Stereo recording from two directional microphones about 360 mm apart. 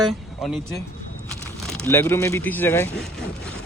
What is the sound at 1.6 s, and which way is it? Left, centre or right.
Speech, centre.